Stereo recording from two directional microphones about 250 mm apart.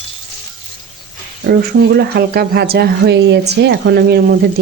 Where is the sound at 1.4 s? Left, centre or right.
Right.